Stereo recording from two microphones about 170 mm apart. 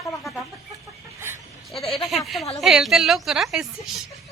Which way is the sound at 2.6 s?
Centre (ahead or behind).